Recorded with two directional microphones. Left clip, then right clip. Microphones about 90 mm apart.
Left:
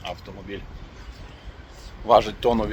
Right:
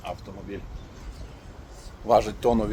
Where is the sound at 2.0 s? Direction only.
10° left (ahead or behind).